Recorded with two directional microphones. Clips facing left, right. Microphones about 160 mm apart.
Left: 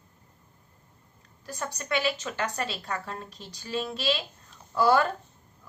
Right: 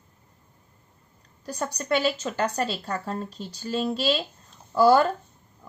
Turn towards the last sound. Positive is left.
turn(degrees=-35)  # may be behind; listen again after turning